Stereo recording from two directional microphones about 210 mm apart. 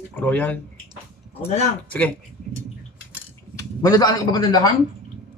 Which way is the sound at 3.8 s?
15° left (ahead or behind).